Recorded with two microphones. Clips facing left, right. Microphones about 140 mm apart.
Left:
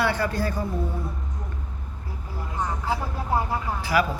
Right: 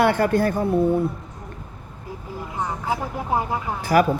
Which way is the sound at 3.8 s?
45° right (ahead or behind).